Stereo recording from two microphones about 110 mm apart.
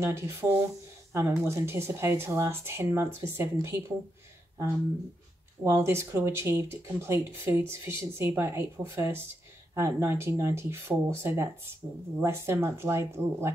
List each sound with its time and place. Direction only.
0.0 s speech: 25° right (ahead or behind)
5.6 s speech: 25° right (ahead or behind)